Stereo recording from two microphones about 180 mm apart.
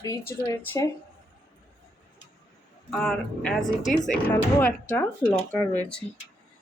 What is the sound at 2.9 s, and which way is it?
Speech, 5° left (ahead or behind).